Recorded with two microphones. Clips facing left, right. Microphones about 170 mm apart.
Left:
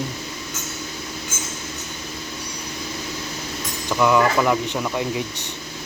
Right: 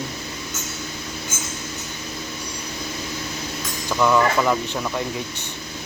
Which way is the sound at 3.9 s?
10° left (ahead or behind).